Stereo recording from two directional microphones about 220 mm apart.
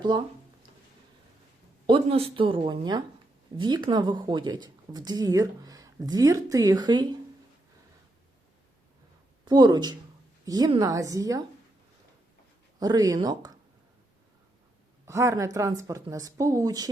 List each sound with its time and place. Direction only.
1.9 s speech: 25° right (ahead or behind)
9.4 s speech: 20° right (ahead or behind)
13.1 s speech: 15° right (ahead or behind)
15.0 s speech: 10° right (ahead or behind)